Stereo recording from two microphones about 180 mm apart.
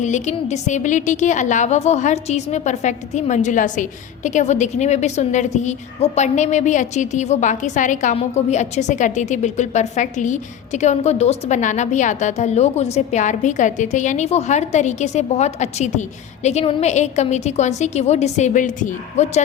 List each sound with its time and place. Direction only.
0.0 s a woman's voice: 40° left (ahead or behind)